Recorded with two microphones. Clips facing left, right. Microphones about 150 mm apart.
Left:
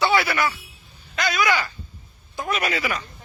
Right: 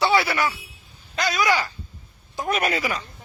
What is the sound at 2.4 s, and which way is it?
Speech, 50° right (ahead or behind).